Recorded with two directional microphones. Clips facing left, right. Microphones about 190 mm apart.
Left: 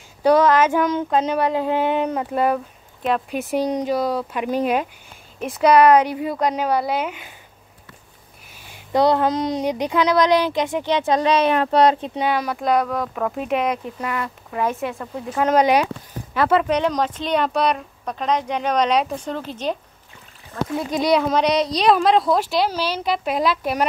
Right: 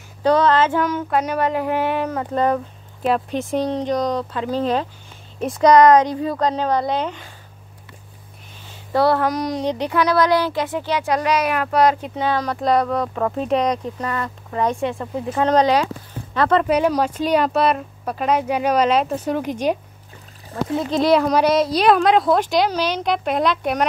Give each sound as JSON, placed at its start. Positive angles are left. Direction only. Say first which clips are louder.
{"t": 0.2, "sound": "speech", "louder": "left 1 dB", "side_deg": 10}
{"t": 8.6, "sound": "speech", "louder": "even", "side_deg": 15}
{"t": 12.5, "sound": "a woman's voice", "louder": "right 2 dB", "side_deg": 0}
{"t": 16.3, "sound": "a woman's voice", "louder": "right 1 dB", "side_deg": 5}
{"t": 16.6, "sound": "speech", "louder": "right 2 dB", "side_deg": -10}
{"t": 21.0, "sound": "a woman's voice", "louder": "right 2 dB", "side_deg": 0}